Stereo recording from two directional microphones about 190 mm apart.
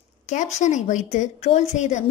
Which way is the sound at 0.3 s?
40° left (ahead or behind).